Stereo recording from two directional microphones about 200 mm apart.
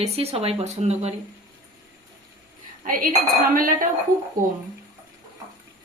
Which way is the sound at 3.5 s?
45° right (ahead or behind).